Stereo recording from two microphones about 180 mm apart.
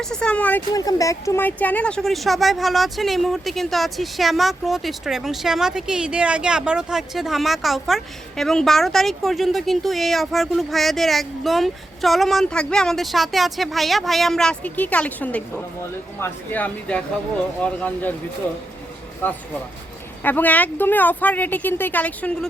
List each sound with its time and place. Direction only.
0.0 s speech: 5° left (ahead or behind)
0.7 s speech: 20° left (ahead or behind)
19.2 s speech: 10° left (ahead or behind)